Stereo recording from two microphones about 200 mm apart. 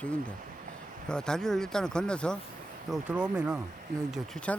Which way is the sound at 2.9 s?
5° right (ahead or behind).